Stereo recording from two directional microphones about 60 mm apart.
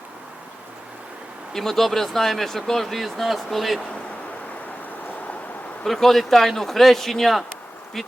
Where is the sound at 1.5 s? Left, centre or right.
Centre.